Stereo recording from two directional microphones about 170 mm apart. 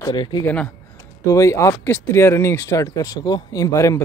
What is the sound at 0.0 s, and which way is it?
Speech, 25° left (ahead or behind).